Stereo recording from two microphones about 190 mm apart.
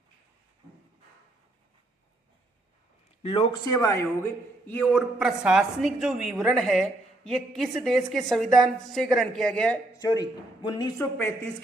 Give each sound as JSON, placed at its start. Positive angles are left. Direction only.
{"t": 3.7, "sound": "speech", "side_deg": 15}
{"t": 10.0, "sound": "a man's voice", "side_deg": 20}